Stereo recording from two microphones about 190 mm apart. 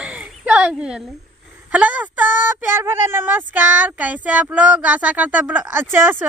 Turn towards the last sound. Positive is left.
turn(degrees=-10)  # may be behind; listen again after turning